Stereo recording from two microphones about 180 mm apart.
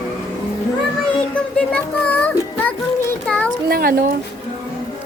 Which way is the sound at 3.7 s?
55° right (ahead or behind).